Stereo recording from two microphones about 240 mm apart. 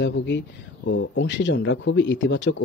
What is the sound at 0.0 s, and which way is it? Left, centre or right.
Speech, left.